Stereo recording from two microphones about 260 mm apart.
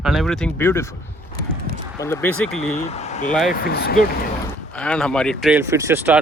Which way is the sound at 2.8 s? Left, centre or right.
Left.